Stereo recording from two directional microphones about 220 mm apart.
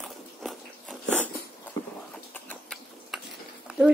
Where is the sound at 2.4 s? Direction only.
5° left (ahead or behind).